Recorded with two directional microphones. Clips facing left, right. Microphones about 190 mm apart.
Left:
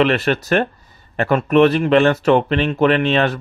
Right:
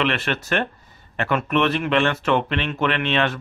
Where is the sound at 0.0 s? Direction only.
40° left (ahead or behind).